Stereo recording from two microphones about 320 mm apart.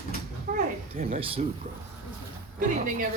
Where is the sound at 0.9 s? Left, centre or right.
Centre.